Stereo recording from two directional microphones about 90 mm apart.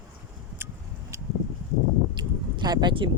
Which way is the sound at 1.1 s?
35° right (ahead or behind).